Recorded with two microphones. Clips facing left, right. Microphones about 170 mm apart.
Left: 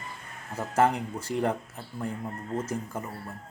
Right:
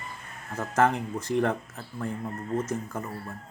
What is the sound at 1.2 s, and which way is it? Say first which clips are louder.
Speech: right 5 dB; 30° left (ahead or behind).